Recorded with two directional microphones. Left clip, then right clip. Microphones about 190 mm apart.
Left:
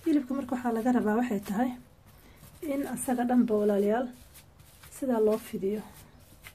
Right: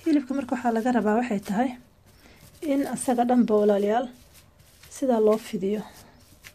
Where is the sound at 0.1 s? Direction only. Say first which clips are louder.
Right 4 dB; 35° right (ahead or behind).